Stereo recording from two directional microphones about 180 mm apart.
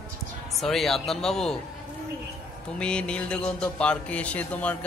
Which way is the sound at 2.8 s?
5° left (ahead or behind).